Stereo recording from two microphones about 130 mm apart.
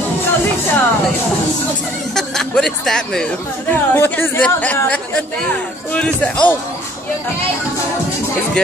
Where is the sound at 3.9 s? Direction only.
15° left (ahead or behind).